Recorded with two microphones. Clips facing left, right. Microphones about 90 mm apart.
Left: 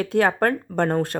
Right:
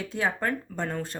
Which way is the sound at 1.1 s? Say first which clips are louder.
Left 10 dB; 55° left (ahead or behind).